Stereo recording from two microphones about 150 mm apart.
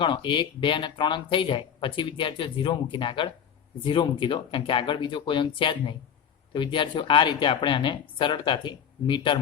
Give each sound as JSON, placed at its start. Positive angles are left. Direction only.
{"t": 0.0, "sound": "speech", "side_deg": 35}